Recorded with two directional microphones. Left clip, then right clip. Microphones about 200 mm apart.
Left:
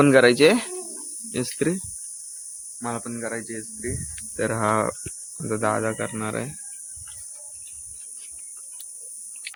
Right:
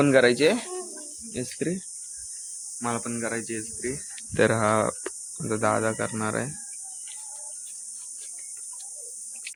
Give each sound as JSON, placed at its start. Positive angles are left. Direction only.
{"t": 0.0, "sound": "speech", "side_deg": 20}
{"t": 2.8, "sound": "speech", "side_deg": 0}